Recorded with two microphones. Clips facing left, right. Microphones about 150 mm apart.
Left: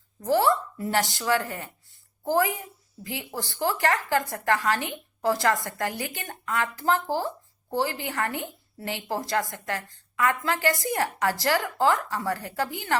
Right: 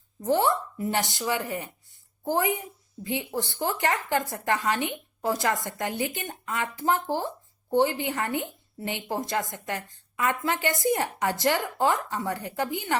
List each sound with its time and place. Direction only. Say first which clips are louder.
0.2 s a woman's voice: left 1 dB; 20° right (ahead or behind)